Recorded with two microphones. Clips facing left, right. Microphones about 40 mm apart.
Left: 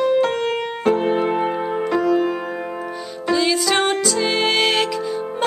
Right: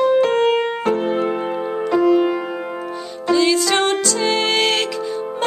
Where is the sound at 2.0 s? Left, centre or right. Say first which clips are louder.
Right 5 dB; right.